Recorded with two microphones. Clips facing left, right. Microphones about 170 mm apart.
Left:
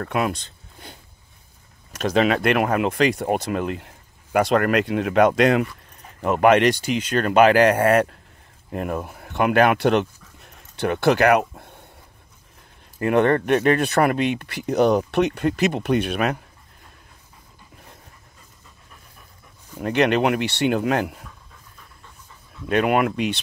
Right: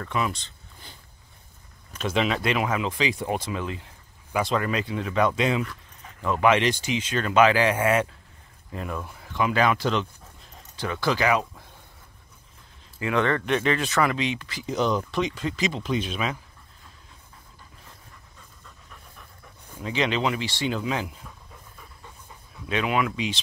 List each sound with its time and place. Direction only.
0.0 s speech: 55° left (ahead or behind)
2.2 s speech: 60° left (ahead or behind)
13.0 s speech: 55° left (ahead or behind)
19.8 s speech: 60° left (ahead or behind)
22.7 s speech: 55° left (ahead or behind)